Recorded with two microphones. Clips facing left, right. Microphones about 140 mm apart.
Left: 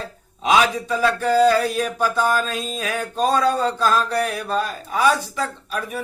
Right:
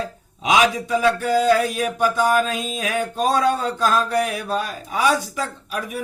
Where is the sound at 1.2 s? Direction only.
35° left (ahead or behind).